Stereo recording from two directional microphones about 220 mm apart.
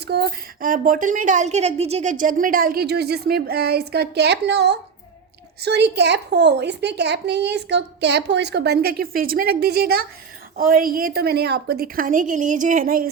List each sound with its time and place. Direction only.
0.1 s a child's voice: 45° right (ahead or behind)